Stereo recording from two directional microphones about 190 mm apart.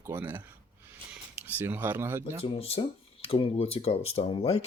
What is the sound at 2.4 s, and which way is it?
Speech, 30° left (ahead or behind).